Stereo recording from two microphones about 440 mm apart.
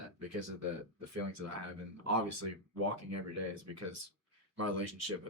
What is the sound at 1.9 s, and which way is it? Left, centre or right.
Speech, right.